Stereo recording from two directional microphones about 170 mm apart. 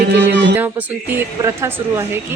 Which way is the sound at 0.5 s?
10° right (ahead or behind).